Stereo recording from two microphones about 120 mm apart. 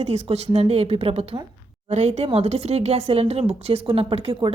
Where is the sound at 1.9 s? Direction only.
70° right (ahead or behind).